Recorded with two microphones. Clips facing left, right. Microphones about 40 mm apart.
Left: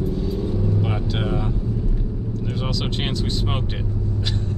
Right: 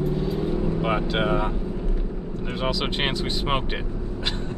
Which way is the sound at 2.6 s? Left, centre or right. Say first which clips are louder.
Right 3 dB; centre.